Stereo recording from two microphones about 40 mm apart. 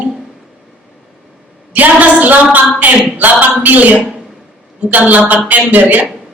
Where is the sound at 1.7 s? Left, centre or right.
Right.